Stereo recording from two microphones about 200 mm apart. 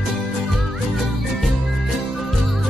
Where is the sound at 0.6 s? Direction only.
Centre (ahead or behind).